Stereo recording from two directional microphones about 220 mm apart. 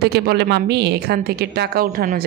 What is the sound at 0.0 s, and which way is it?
Speech, 45° right (ahead or behind).